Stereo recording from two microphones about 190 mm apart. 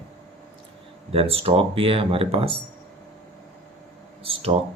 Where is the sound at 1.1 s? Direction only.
30° right (ahead or behind).